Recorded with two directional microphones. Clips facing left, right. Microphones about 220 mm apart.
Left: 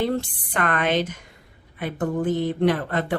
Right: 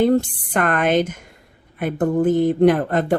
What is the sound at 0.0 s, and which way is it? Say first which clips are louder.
Speech: right 8 dB; 45° right (ahead or behind).